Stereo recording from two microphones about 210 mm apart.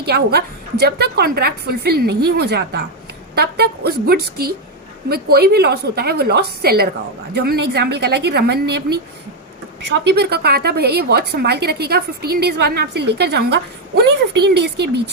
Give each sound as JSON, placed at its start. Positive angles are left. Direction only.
{"t": 0.0, "sound": "a woman's voice", "side_deg": -50}
{"t": 10.0, "sound": "a woman's voice", "side_deg": -50}